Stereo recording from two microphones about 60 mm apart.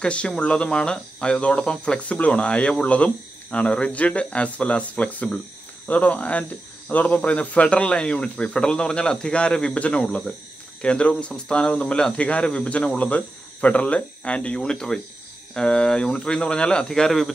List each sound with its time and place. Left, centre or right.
0.0 s speech: centre